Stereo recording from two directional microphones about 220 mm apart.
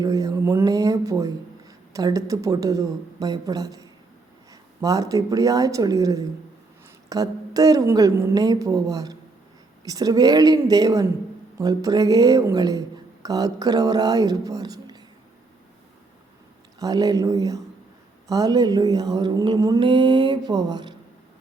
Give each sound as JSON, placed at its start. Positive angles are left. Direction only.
{"t": 0.0, "sound": "speech", "side_deg": -15}
{"t": 16.8, "sound": "speech", "side_deg": -15}